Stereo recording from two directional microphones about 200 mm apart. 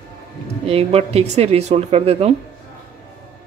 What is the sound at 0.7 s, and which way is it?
Speech, 30° right (ahead or behind).